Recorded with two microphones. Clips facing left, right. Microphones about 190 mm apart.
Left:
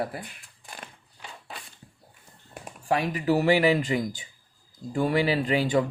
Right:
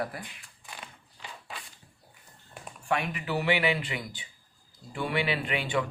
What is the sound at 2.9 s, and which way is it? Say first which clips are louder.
Speech: left 6 dB; 35° left (ahead or behind).